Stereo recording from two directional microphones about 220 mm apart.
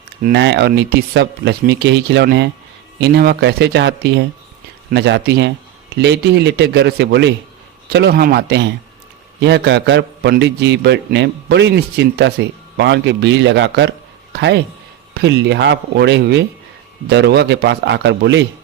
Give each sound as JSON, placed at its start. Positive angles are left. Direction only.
{"t": 0.2, "sound": "a man's voice", "side_deg": -45}